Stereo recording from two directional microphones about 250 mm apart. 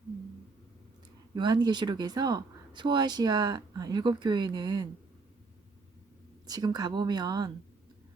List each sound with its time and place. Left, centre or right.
1.4 s speech: centre
6.5 s speech: centre